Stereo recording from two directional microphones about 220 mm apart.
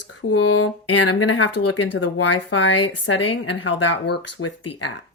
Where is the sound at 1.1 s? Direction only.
60° left (ahead or behind); by 2.0 s 90° left.